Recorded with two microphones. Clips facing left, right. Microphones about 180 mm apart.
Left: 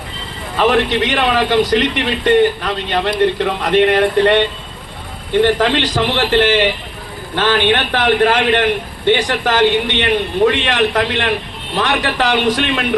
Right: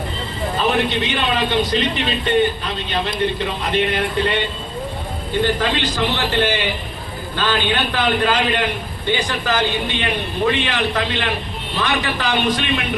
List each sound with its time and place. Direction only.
0.5 s speech: 80° left